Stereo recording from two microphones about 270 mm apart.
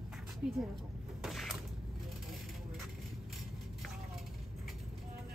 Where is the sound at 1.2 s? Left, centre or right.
Centre.